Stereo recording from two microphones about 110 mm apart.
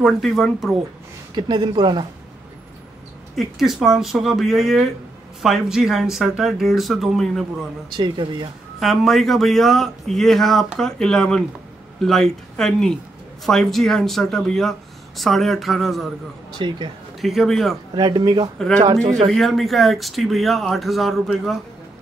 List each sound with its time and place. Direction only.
0.0 s a man's voice: centre (ahead or behind)
1.3 s speech: 45° right (ahead or behind)
3.3 s a man's voice: centre (ahead or behind)
8.0 s speech: 45° right (ahead or behind)
8.7 s a man's voice: centre (ahead or behind)
16.5 s speech: 45° right (ahead or behind)
17.2 s a man's voice: centre (ahead or behind)
17.9 s speech: 40° right (ahead or behind)
19.3 s a man's voice: centre (ahead or behind)